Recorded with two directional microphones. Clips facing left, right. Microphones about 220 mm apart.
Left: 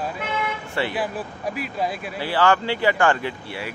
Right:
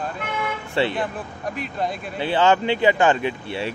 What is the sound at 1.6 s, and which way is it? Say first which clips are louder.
Speech: even; 5° left (ahead or behind).